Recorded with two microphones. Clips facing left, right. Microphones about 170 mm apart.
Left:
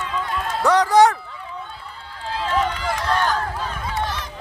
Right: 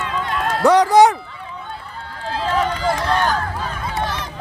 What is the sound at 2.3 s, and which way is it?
Run, 40° right (ahead or behind).